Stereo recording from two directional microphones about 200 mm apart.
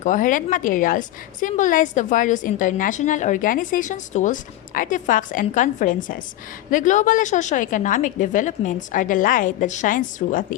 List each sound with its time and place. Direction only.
0.0 s a woman's voice: 40° left (ahead or behind)